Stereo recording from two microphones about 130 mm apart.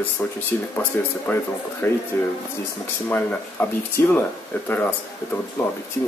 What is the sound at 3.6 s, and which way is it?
Speech, 20° left (ahead or behind).